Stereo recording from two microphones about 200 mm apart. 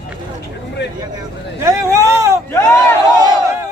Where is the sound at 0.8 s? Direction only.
60° left (ahead or behind).